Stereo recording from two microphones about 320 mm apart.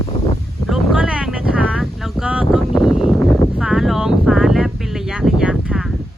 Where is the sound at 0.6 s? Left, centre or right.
Centre.